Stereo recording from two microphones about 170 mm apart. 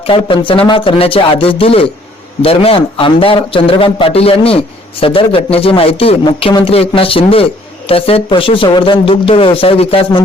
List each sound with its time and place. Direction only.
0.0 s a man's voice: 30° left (ahead or behind)